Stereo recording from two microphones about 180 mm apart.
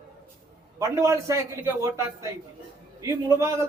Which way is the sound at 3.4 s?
15° right (ahead or behind).